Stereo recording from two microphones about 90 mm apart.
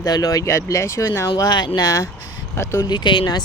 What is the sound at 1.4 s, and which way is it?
Speech, 50° left (ahead or behind).